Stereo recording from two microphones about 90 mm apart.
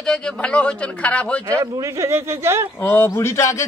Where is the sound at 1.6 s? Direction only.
35° right (ahead or behind).